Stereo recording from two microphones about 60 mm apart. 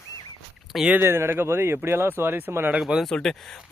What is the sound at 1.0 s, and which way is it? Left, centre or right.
Speech, right.